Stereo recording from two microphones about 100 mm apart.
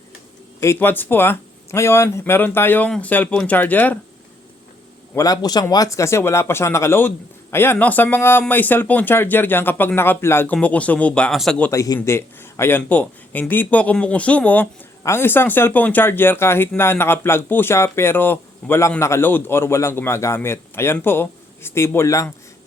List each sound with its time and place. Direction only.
0.6 s speech: 25° left (ahead or behind)
5.1 s a man's voice: 40° left (ahead or behind)
10.5 s speech: 15° left (ahead or behind)
11.7 s a man's voice: 30° left (ahead or behind)